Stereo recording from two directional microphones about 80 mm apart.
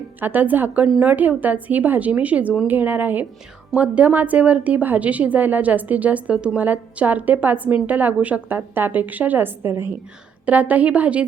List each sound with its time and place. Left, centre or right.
0.2 s a woman's voice: right